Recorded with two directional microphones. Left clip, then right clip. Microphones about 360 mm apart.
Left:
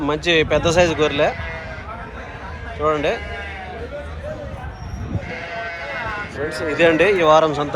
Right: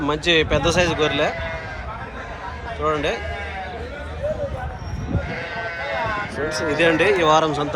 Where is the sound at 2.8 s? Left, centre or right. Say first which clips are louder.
Left 3 dB; centre.